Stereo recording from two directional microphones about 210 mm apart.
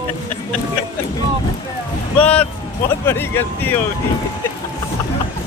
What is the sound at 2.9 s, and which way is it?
Speech, 10° left (ahead or behind).